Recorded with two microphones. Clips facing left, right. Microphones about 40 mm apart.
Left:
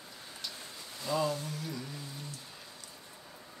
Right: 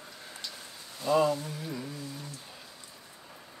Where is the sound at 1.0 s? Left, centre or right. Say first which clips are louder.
Right 6 dB; right.